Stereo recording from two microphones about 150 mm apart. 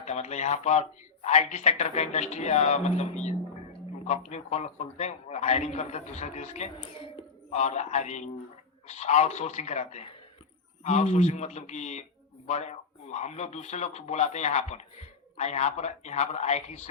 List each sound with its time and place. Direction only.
0.0 s speech: 50° left (ahead or behind)
6.7 s speech: 35° left (ahead or behind)
7.5 s speech: 50° left (ahead or behind)